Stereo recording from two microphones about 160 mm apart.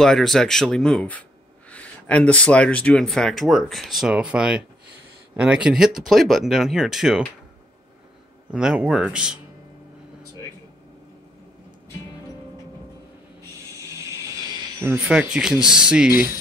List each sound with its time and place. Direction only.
0.0 s speech: 5° left (ahead or behind)
8.5 s speech: 5° right (ahead or behind)
13.9 s a sound: 20° right (ahead or behind)
14.9 s speech: 5° right (ahead or behind)